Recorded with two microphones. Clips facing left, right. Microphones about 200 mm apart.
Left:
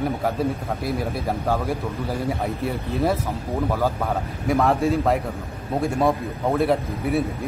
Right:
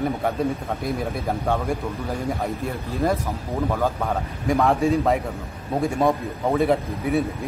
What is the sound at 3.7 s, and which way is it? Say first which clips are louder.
A man's voice: even; 5° left (ahead or behind).